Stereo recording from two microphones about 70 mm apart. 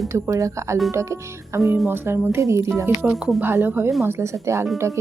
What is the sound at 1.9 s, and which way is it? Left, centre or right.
A woman's voice, right.